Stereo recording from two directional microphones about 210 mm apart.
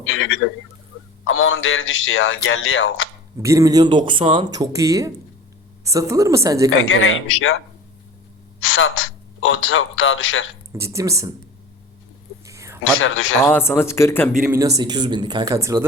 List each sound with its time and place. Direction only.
0.1 s a man's voice: 70° left (ahead or behind)
3.3 s speech: 15° right (ahead or behind)
6.8 s a man's voice: 70° left (ahead or behind)
8.6 s a man's voice: 70° left (ahead or behind)
10.7 s speech: 15° right (ahead or behind)
12.5 s a sound: 15° right (ahead or behind)
12.8 s a man's voice: 70° left (ahead or behind)
13.4 s speech: 10° left (ahead or behind)
14.3 s speech: 5° right (ahead or behind)
14.8 s speech: 20° right (ahead or behind)